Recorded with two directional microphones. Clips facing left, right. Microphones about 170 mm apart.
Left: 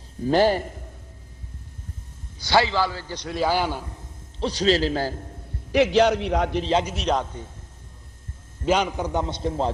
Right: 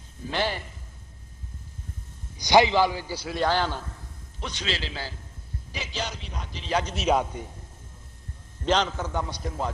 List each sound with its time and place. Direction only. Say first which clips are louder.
0.3 s a man's voice: left 10 dB; 40° left (ahead or behind)
2.4 s a man's voice: right 2 dB; 15° right (ahead or behind); by 4.0 s 15° left (ahead or behind)
4.4 s a man's voice: left 12 dB; 35° left (ahead or behind)
5.7 s a man's voice: left 17 dB; 70° left (ahead or behind)
6.9 s a man's voice: even; 5° right (ahead or behind)
8.6 s a man's voice: left 3 dB; 10° left (ahead or behind); by 9.7 s 30° left (ahead or behind)